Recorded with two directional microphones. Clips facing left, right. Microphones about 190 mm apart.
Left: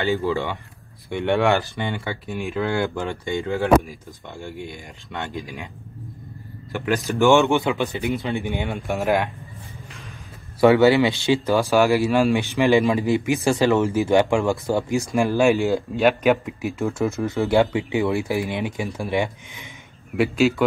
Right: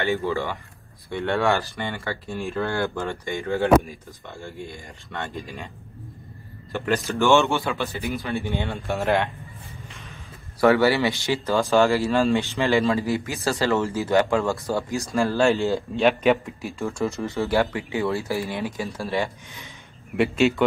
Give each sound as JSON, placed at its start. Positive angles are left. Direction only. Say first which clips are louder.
{"t": 1.1, "sound": "a man's voice", "louder": "left 3 dB", "side_deg": 15}
{"t": 6.7, "sound": "a man's voice", "louder": "left 1 dB", "side_deg": 15}
{"t": 10.6, "sound": "a man's voice", "louder": "left 4 dB", "side_deg": 20}
{"t": 16.0, "sound": "speech", "louder": "left 1 dB", "side_deg": 5}
{"t": 17.4, "sound": "a man's voice", "louder": "left 4 dB", "side_deg": 20}
{"t": 20.2, "sound": "speech", "louder": "left 1 dB", "side_deg": 0}